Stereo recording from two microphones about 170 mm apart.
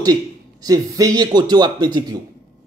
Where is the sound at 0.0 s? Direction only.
20° right (ahead or behind).